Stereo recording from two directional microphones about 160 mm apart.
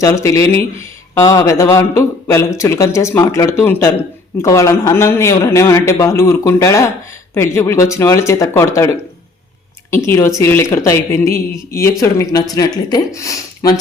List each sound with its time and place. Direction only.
0.0 s speech: 20° left (ahead or behind)
9.9 s speech: 15° left (ahead or behind)